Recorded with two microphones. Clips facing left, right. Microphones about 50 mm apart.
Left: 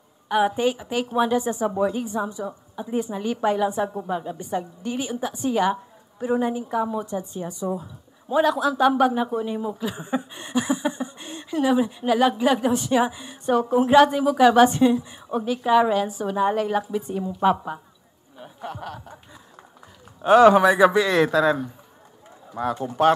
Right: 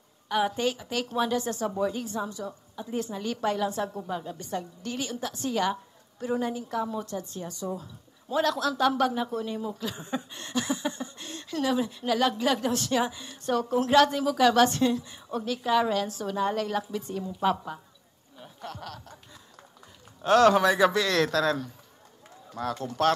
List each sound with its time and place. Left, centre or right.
0.3 s a woman's voice: centre
20.2 s a woman's voice: centre